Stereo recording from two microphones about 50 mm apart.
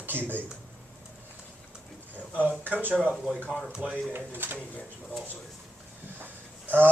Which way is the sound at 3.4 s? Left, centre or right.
Centre.